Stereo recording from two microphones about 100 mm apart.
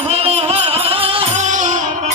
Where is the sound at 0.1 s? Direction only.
90° right.